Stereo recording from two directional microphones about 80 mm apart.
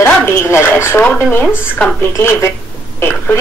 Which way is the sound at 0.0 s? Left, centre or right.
Left.